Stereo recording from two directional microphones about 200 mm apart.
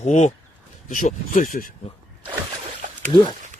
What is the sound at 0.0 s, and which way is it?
Speech, 35° left (ahead or behind).